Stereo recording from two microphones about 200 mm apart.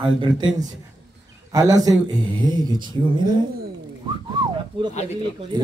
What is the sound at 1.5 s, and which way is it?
A man's voice, 20° right (ahead or behind).